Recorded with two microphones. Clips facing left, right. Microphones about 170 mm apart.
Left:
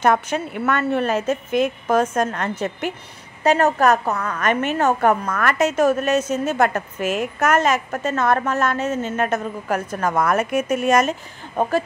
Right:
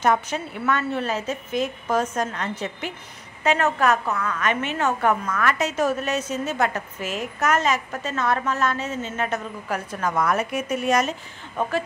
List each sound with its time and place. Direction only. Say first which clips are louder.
0.0 s a woman's voice: left 3 dB; 55° left (ahead or behind)
3.4 s a woman's voice: left 4 dB; 40° left (ahead or behind)